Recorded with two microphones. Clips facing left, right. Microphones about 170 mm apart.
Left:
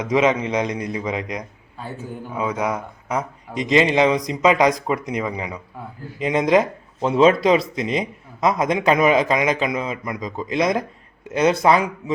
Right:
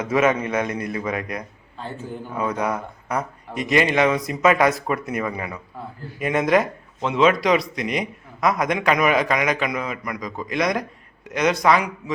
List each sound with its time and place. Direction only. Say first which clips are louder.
0.0 s a man's voice: left 1 dB; 15° left (ahead or behind)
7.0 s a man's voice: left 3 dB; 35° left (ahead or behind)